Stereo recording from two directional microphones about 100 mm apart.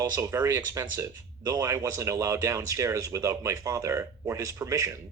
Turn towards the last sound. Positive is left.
turn(degrees=-35)  # may be behind; listen again after turning